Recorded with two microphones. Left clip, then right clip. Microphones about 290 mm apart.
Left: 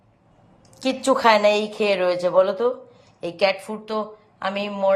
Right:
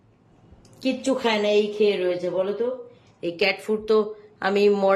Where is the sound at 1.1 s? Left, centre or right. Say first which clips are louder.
Left 6 dB; left.